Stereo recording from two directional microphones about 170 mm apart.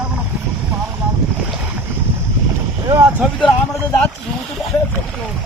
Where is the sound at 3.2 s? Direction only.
Centre (ahead or behind).